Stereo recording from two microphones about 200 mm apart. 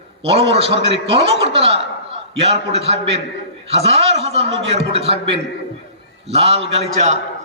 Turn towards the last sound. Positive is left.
turn(degrees=-30)  # may be behind; listen again after turning